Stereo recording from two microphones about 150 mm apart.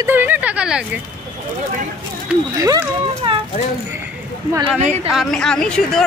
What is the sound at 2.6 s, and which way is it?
Speech, 25° right (ahead or behind).